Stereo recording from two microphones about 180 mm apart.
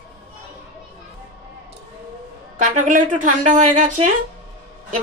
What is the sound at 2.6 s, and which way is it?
Speech, 45° right (ahead or behind).